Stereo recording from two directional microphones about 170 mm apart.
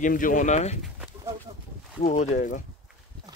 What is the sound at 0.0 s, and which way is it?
Speech, 50° left (ahead or behind).